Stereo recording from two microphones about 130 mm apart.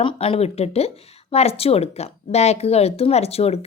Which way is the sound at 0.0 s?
45° left (ahead or behind).